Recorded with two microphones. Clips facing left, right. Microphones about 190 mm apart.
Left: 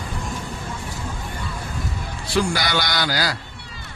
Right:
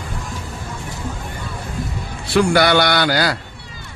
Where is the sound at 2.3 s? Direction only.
65° right (ahead or behind).